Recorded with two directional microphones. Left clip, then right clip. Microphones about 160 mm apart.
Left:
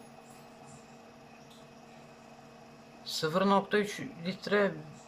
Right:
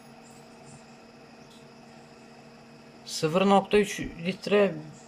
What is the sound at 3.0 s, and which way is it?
Speech, 15° right (ahead or behind).